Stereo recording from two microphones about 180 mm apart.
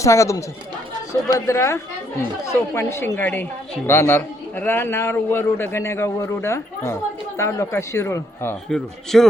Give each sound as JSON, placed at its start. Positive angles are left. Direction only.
{"t": 0.0, "sound": "a man's voice", "side_deg": 15}
{"t": 9.1, "sound": "speech", "side_deg": 0}